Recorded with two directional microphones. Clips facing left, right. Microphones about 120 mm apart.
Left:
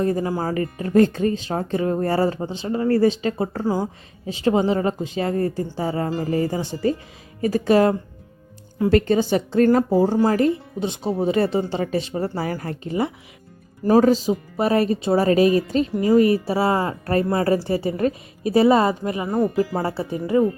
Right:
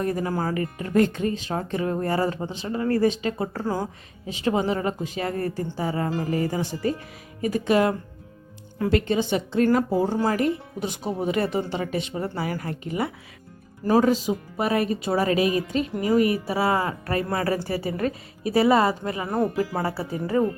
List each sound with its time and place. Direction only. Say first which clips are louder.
0.0 s a woman's voice: left 3 dB; 25° left (ahead or behind)
10.3 s a woman's voice: left 4 dB; 30° left (ahead or behind)